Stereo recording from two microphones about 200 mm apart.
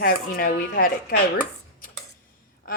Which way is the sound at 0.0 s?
45° left (ahead or behind).